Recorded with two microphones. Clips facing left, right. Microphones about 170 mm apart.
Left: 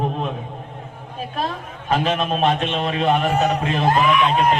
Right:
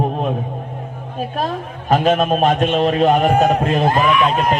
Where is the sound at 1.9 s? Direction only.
45° right (ahead or behind).